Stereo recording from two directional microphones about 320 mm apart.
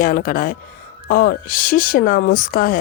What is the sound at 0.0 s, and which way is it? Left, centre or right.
Speech, left.